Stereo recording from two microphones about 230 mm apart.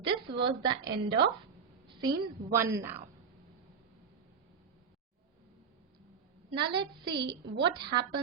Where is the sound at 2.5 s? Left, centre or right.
Centre.